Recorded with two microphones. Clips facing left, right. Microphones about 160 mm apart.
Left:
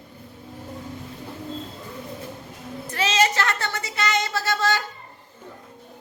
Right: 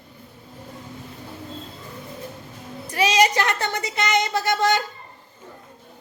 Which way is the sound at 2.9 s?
15° right (ahead or behind).